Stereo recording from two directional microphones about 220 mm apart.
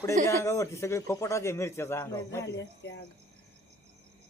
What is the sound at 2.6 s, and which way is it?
Speech, 45° left (ahead or behind).